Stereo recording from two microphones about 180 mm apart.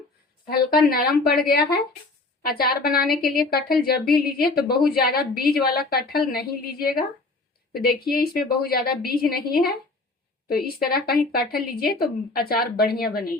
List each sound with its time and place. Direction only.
0.4 s a woman's voice: 55° left (ahead or behind)